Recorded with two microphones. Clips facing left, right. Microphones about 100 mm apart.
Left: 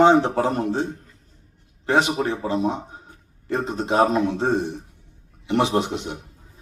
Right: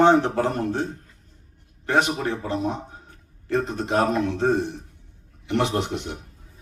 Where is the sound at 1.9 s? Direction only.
20° left (ahead or behind).